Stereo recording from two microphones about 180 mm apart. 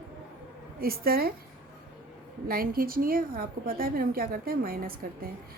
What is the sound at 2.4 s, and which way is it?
A woman's voice, 55° right (ahead or behind).